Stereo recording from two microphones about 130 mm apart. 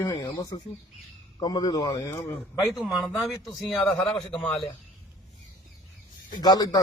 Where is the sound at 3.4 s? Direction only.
5° left (ahead or behind).